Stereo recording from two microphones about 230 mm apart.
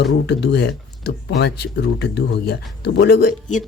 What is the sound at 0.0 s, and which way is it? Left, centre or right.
Speech, left.